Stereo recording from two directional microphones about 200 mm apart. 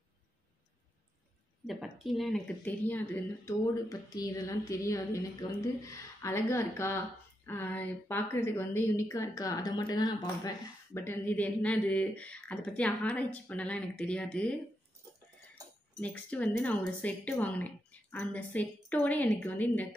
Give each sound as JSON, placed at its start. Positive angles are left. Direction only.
{"t": 1.7, "sound": "a woman's voice", "side_deg": 0}
{"t": 16.0, "sound": "a woman's voice", "side_deg": 5}